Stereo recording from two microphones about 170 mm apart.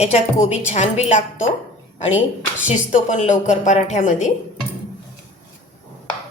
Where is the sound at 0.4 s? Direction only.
40° left (ahead or behind).